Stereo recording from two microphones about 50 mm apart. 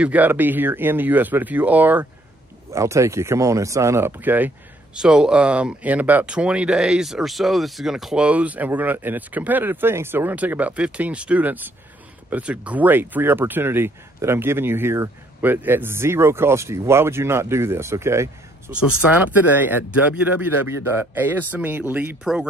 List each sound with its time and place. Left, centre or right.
0.0 s speech: right
2.7 s speech: right
4.0 s speech: right
4.9 s speech: centre; by 6.3 s right
6.3 s speech: right
8.2 s speech: right
10.1 s speech: right
10.6 s speech: right
11.4 s speech: right
18.7 s speech: right
19.4 s speech: right
22.2 s speech: centre